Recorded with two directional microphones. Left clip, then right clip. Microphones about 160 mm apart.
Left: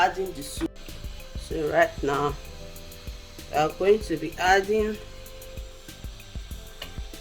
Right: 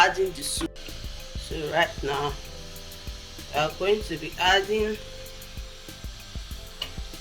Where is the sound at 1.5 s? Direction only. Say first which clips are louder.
Left 3 dB; 70° left (ahead or behind).